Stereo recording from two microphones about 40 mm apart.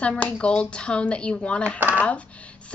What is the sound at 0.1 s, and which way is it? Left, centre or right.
A woman's voice, left.